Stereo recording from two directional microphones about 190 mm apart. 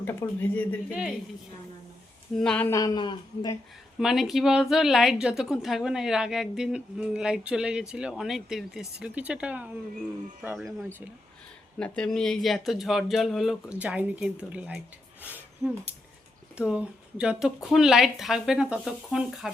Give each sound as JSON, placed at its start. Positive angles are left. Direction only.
{"t": 0.0, "sound": "speech", "side_deg": 10}
{"t": 0.9, "sound": "a woman's voice", "side_deg": -5}
{"t": 2.3, "sound": "a woman's voice", "side_deg": 5}
{"t": 2.7, "sound": "speech", "side_deg": 20}
{"t": 4.0, "sound": "a woman's voice", "side_deg": 0}
{"t": 11.8, "sound": "a woman's voice", "side_deg": 5}
{"t": 15.2, "sound": "a sound", "side_deg": -10}
{"t": 16.6, "sound": "a woman's voice", "side_deg": -5}